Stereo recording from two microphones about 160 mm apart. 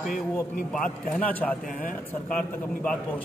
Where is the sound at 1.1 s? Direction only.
10° left (ahead or behind).